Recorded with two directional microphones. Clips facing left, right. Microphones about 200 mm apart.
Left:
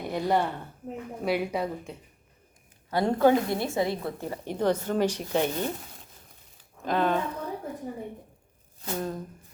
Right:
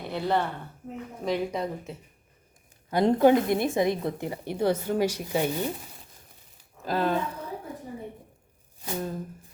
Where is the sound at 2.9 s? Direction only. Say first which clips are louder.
Right 2 dB; 15° right (ahead or behind).